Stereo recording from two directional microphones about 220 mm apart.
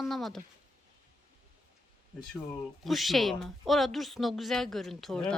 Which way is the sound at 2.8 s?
Centre (ahead or behind).